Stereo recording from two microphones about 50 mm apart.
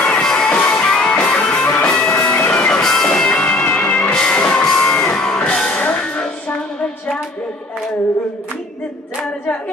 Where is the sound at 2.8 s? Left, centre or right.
Centre.